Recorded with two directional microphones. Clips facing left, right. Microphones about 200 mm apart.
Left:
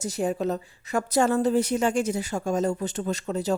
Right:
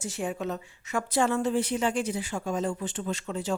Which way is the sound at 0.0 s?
40° left (ahead or behind).